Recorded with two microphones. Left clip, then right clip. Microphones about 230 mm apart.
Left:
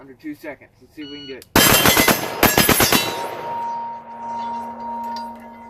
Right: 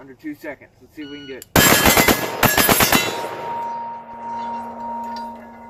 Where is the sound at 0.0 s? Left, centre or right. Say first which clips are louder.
Right 1 dB; centre.